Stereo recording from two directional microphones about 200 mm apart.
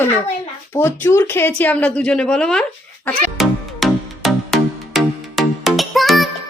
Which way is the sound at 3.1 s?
Centre (ahead or behind).